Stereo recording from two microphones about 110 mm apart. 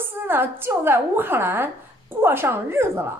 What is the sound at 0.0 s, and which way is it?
A woman's voice, 20° right (ahead or behind).